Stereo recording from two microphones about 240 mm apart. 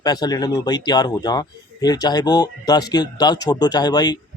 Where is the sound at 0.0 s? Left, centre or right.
Centre.